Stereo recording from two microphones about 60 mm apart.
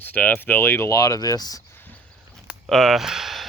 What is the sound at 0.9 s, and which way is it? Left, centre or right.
Speech, left.